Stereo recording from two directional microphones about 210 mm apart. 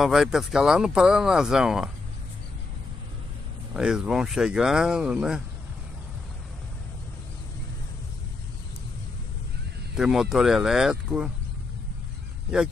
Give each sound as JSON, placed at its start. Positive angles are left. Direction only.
{"t": 0.0, "sound": "speech", "side_deg": 0}
{"t": 3.7, "sound": "speech", "side_deg": -5}
{"t": 9.9, "sound": "speech", "side_deg": 0}